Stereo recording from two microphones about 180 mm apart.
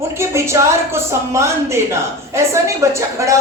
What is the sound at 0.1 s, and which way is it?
A woman's voice, 15° right (ahead or behind).